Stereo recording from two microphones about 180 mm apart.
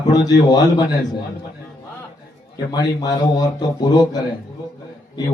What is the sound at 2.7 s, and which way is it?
A man's voice, 20° left (ahead or behind).